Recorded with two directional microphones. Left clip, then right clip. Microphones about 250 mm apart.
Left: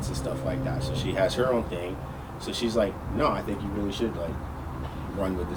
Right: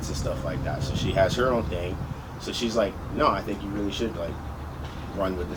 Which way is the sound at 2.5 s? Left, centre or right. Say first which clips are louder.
Right 1 dB; centre.